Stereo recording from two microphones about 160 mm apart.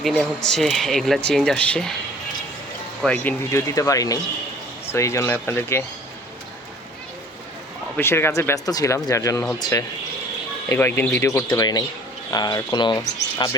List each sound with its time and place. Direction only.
0.0 s speech: 5° left (ahead or behind)
3.0 s speech: 5° left (ahead or behind)
3.5 s speech: 20° left (ahead or behind)
7.9 s speech: 15° left (ahead or behind)